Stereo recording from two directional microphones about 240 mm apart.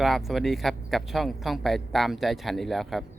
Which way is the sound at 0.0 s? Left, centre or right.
Centre.